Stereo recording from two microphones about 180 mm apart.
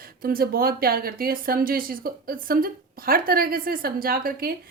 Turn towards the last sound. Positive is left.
turn(degrees=-55)  # may be behind; listen again after turning